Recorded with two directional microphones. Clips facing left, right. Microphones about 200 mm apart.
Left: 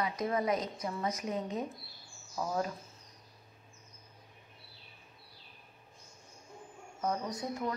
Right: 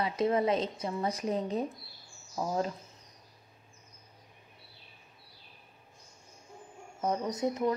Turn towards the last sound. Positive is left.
turn(degrees=-20)  # may be behind; listen again after turning